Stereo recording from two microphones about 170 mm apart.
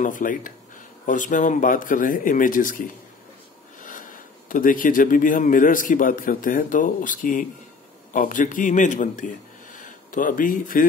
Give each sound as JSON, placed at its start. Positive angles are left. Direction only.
{"t": 0.0, "sound": "speech", "side_deg": 50}
{"t": 3.8, "sound": "a man's voice", "side_deg": 50}